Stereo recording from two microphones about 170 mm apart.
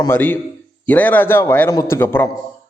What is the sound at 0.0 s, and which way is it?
A man's voice, 10° left (ahead or behind).